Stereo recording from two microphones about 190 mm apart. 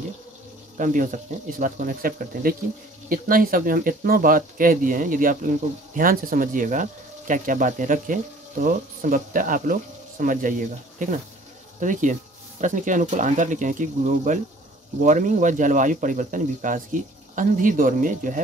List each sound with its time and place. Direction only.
0.7 s speech: 45° right (ahead or behind)